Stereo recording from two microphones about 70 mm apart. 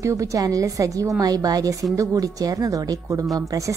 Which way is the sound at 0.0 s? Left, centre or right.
Right.